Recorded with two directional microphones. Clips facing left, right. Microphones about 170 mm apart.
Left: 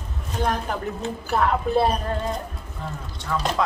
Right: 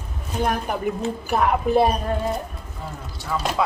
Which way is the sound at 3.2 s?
5° right (ahead or behind).